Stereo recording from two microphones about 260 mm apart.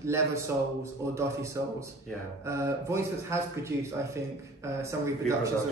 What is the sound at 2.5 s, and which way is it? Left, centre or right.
Speech, centre.